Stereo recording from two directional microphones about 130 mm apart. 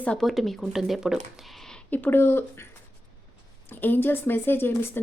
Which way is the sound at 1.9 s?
15° left (ahead or behind).